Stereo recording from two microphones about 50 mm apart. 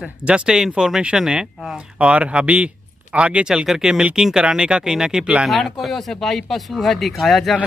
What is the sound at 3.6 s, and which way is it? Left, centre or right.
Speech, centre.